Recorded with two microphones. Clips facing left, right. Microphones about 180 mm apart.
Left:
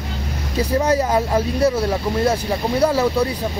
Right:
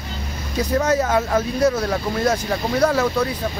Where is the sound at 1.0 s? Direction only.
35° left (ahead or behind).